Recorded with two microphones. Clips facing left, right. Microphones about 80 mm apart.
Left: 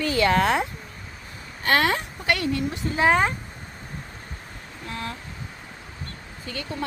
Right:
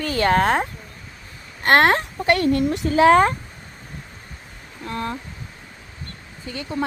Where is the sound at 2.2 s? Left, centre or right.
Right.